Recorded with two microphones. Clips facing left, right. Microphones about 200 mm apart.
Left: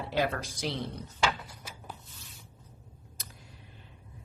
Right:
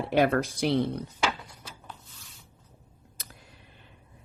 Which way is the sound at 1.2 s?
5° left (ahead or behind).